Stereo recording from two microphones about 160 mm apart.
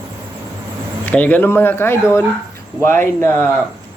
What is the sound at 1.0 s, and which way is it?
Speech, 10° left (ahead or behind).